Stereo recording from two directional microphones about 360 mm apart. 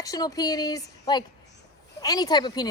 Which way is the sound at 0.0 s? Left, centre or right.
Centre.